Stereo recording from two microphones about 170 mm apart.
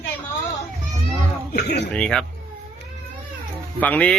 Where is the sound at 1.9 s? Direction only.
5° left (ahead or behind).